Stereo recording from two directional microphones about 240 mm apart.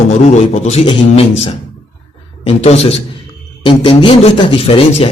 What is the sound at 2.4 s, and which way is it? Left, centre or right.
A man's voice, left.